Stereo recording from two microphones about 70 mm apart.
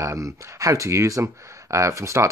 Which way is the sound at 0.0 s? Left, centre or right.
Right.